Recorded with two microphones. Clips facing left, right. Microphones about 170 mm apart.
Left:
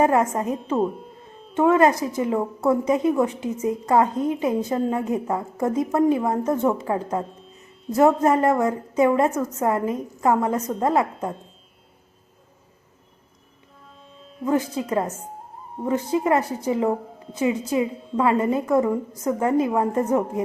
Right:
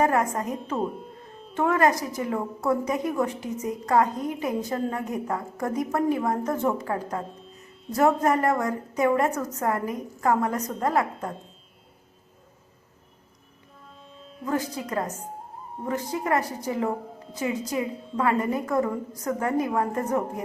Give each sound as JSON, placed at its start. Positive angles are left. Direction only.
{"t": 0.0, "sound": "a woman's voice", "side_deg": 25}
{"t": 0.8, "sound": "music", "side_deg": 0}
{"t": 1.5, "sound": "a woman's voice", "side_deg": 20}
{"t": 7.2, "sound": "speech", "side_deg": 0}
{"t": 7.9, "sound": "a woman's voice", "side_deg": 25}
{"t": 14.1, "sound": "music", "side_deg": 0}
{"t": 14.4, "sound": "a woman's voice", "side_deg": 20}
{"t": 15.5, "sound": "music", "side_deg": 0}
{"t": 15.9, "sound": "a woman's voice", "side_deg": 20}
{"t": 17.9, "sound": "a woman's voice", "side_deg": 0}
{"t": 18.2, "sound": "a woman's voice", "side_deg": 25}